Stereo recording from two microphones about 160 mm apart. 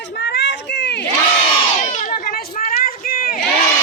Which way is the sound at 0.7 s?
90° left.